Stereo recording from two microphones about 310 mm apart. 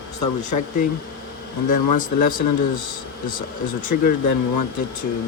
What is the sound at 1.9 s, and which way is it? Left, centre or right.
Speech, left.